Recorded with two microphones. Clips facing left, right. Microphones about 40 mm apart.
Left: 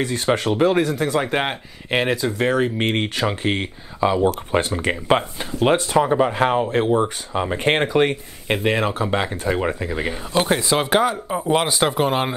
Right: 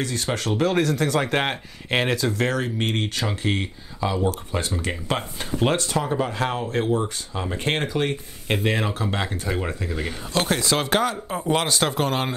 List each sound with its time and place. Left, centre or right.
0.0 s speech: left
5.6 s speech: centre
8.6 s speech: centre